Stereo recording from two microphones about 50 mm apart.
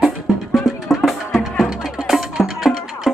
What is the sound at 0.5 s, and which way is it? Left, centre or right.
Music, centre.